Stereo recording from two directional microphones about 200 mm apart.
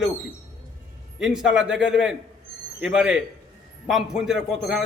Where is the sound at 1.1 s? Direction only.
5° right (ahead or behind).